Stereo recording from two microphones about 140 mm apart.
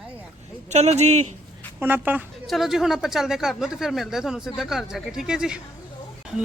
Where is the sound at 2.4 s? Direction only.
Centre (ahead or behind).